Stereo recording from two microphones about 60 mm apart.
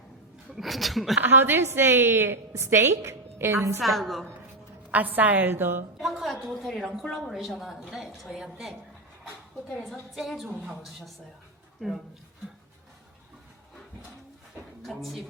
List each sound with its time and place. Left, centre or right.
0.5 s a woman's voice: centre
1.2 s a woman's voice: right
3.8 s a woman's voice: centre
4.9 s a woman's voice: right
6.0 s a woman's voice: centre
9.7 s a woman's voice: centre
14.8 s speech: centre